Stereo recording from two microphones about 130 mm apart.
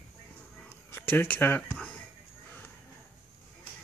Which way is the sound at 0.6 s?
15° left (ahead or behind).